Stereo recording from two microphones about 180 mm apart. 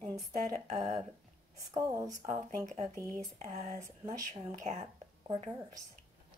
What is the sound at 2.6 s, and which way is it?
Speech, 40° right (ahead or behind).